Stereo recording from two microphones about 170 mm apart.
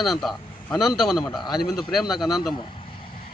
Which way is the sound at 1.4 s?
25° left (ahead or behind).